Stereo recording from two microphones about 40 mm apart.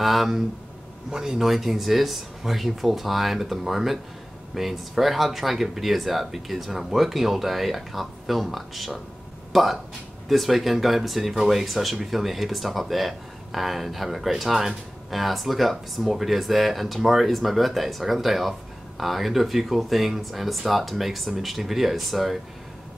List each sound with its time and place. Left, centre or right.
0.0 s speech: centre
1.1 s speech: centre